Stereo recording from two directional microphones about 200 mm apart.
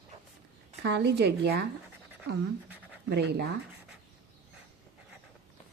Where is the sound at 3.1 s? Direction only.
55° right (ahead or behind).